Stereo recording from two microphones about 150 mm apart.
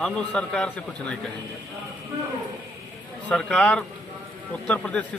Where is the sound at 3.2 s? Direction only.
10° left (ahead or behind).